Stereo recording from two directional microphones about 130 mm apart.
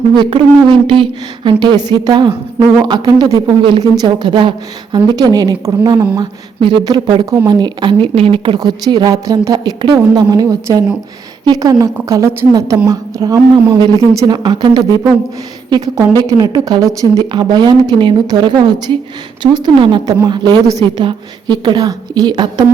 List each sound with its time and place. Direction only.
0.1 s a woman's voice: 40° right (ahead or behind)
21.0 s a woman's voice: 35° right (ahead or behind)